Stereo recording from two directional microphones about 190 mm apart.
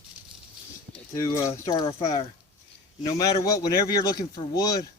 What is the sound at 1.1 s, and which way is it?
Speech, 15° left (ahead or behind).